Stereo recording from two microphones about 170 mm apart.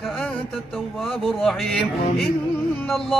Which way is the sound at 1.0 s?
Centre (ahead or behind).